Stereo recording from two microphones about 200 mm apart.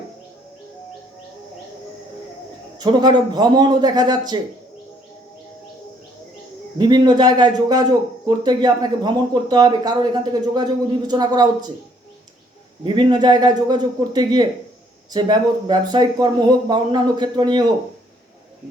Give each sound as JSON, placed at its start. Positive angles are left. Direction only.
{"t": 2.7, "sound": "speech", "side_deg": -20}
{"t": 6.7, "sound": "speech", "side_deg": -20}
{"t": 12.8, "sound": "speech", "side_deg": -25}